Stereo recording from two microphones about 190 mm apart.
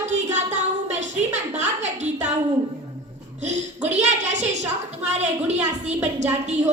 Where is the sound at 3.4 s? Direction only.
40° right (ahead or behind).